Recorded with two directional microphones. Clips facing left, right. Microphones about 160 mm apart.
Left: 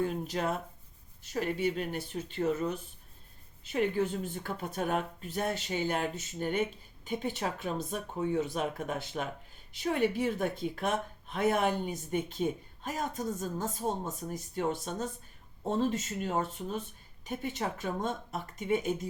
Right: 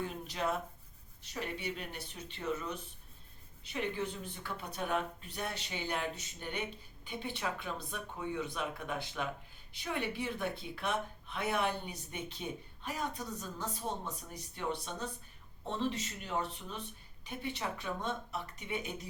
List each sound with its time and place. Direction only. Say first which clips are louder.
0.0 s speech: left 5 dB; 45° left (ahead or behind)